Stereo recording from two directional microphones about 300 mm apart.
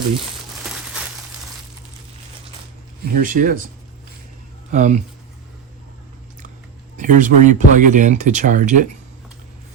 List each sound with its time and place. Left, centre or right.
0.6 s a sound: centre
3.1 s speech: right
4.7 s speech: right
6.9 s speech: right